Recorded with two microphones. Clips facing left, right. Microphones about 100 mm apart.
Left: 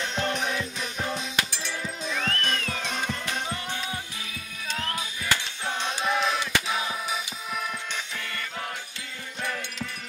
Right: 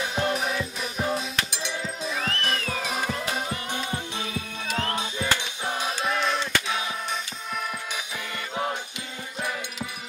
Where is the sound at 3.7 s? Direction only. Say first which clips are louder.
Right 3 dB; 30° right (ahead or behind).